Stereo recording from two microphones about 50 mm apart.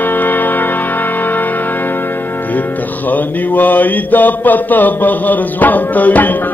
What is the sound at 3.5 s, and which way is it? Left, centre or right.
Mantra, left.